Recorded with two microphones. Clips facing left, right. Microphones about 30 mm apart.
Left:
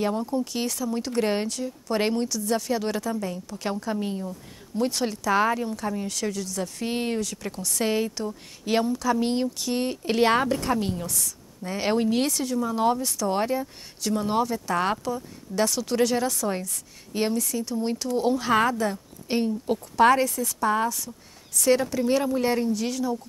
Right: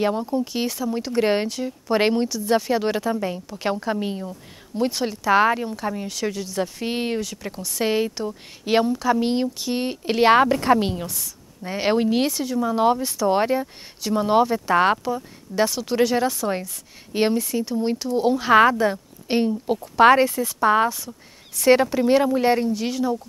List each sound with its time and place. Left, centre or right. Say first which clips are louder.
0.0 s speech: right 3 dB; centre
5.3 s speech: right 5 dB; right
11.1 s speech: left 2 dB; centre
18.5 s a woman's voice: right 10 dB; right
19.6 s speech: right 3 dB; centre
20.0 s speech: right 5 dB; right